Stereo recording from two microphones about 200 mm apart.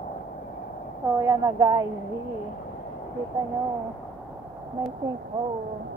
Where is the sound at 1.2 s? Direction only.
15° right (ahead or behind).